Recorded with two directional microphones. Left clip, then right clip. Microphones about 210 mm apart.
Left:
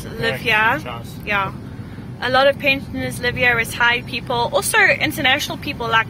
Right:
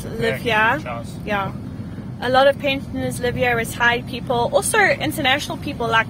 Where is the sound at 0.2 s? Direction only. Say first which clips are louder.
Left 1 dB; 20° right (ahead or behind).